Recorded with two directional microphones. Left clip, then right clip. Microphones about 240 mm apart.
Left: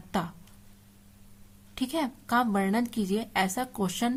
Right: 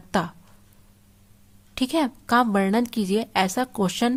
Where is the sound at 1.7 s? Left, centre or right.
Right.